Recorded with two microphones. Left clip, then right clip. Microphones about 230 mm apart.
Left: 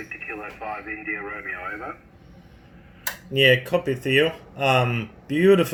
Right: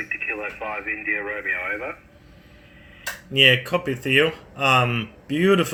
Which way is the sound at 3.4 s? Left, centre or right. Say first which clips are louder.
Right 1 dB; centre.